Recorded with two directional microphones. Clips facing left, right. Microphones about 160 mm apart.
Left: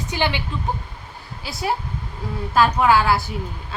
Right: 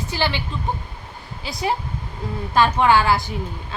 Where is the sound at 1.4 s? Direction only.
5° left (ahead or behind).